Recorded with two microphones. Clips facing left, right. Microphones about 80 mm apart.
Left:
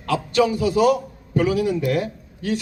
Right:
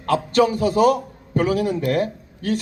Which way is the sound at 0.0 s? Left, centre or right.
Right.